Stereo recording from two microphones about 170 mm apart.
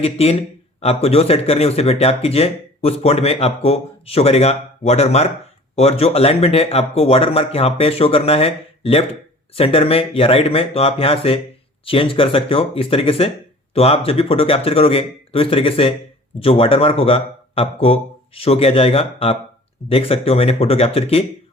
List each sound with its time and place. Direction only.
0.0 s a man's voice: 35° left (ahead or behind)